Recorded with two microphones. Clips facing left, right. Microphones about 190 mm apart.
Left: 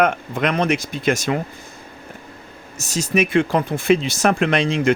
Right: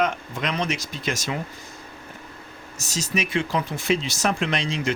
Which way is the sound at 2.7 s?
55° left (ahead or behind).